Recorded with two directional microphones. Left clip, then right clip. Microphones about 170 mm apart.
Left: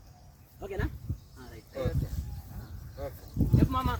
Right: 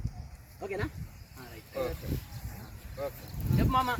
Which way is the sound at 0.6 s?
5° right (ahead or behind).